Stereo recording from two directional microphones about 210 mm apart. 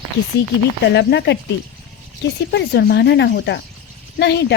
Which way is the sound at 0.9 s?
50° left (ahead or behind).